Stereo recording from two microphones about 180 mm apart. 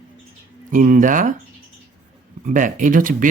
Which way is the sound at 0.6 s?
45° right (ahead or behind).